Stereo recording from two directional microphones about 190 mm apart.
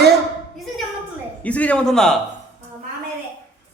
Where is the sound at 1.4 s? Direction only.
5° left (ahead or behind).